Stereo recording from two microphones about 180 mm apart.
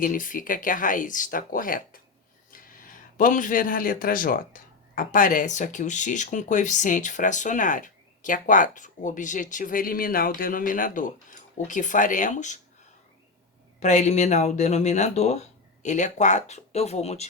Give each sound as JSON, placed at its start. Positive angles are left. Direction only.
{"t": 0.0, "sound": "speech", "side_deg": 50}
{"t": 13.7, "sound": "speech", "side_deg": 40}